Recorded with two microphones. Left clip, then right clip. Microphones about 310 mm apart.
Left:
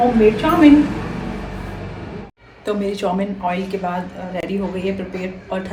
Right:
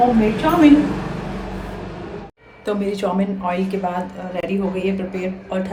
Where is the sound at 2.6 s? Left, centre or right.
Centre.